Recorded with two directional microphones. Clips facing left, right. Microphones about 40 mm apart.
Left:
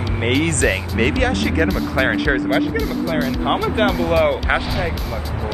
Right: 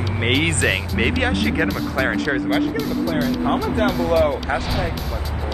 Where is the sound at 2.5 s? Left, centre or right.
Centre.